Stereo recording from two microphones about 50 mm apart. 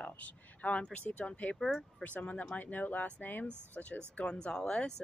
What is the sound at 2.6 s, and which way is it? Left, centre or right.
Speech, left.